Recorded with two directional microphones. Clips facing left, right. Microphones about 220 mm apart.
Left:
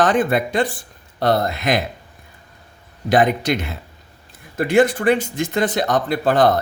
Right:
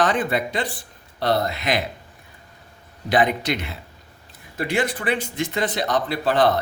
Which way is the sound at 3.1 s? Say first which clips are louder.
Left 4 dB; 45° left (ahead or behind).